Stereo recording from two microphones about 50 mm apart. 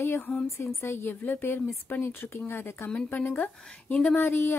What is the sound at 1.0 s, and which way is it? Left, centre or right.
Speech, left.